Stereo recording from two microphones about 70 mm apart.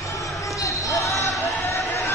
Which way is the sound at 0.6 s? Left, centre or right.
Left.